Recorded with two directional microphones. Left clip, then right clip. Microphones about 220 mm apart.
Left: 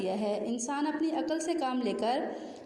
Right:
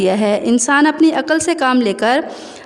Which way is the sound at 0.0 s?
40° right (ahead or behind).